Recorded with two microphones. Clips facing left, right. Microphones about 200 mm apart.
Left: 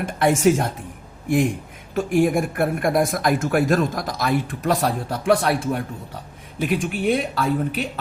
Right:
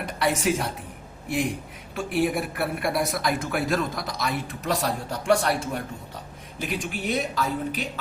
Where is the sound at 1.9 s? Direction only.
45° left (ahead or behind).